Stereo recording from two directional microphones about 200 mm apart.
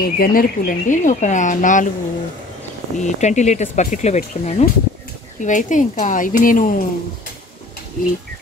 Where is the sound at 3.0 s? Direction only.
35° left (ahead or behind).